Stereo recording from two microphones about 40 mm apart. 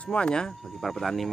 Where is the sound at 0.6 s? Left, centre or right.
Centre.